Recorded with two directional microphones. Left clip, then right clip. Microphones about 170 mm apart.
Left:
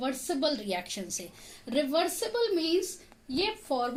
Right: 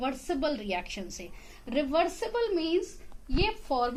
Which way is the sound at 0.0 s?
55° left (ahead or behind).